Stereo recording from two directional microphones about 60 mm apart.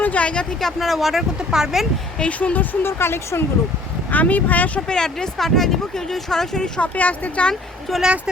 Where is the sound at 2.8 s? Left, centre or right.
Left.